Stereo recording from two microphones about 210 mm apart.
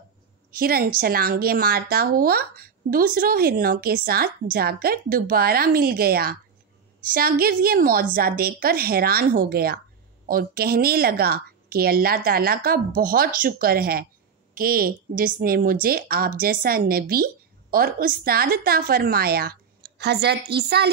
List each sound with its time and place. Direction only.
0.5 s a woman's voice: 45° right (ahead or behind)